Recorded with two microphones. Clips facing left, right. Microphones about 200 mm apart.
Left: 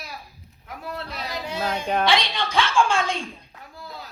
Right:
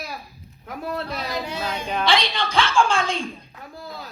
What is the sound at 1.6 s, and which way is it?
Speech, 50° left (ahead or behind).